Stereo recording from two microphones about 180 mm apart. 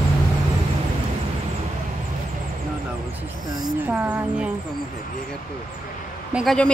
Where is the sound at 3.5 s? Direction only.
20° right (ahead or behind).